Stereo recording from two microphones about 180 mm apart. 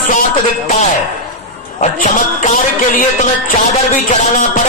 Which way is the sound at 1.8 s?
45° left (ahead or behind).